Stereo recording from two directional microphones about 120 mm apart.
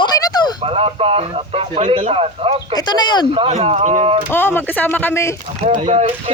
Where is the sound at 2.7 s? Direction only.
35° left (ahead or behind).